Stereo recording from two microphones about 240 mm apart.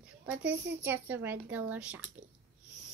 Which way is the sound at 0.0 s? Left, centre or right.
Centre.